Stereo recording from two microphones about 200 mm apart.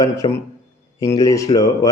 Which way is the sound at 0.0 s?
15° left (ahead or behind).